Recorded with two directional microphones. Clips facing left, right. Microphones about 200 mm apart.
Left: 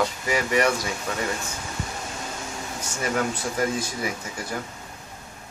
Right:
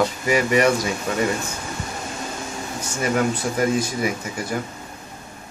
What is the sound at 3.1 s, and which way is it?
Speech, 15° right (ahead or behind).